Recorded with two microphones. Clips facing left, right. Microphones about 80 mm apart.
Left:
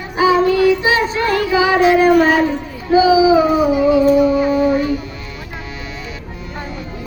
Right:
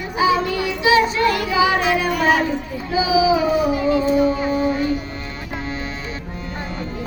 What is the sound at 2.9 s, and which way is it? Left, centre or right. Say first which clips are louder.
Speech: left 6 dB; left.